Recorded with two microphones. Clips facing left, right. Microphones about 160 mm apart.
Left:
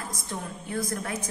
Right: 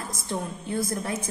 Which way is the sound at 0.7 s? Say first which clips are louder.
Right 2 dB; 25° right (ahead or behind).